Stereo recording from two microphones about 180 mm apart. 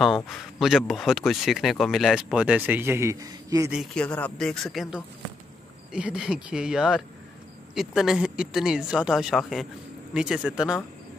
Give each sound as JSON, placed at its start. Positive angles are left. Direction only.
{"t": 0.0, "sound": "speech", "side_deg": 0}
{"t": 3.7, "sound": "speech", "side_deg": 0}